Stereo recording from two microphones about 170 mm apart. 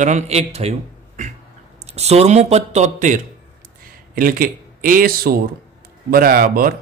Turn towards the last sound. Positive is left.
turn(degrees=-60)  # may be behind; listen again after turning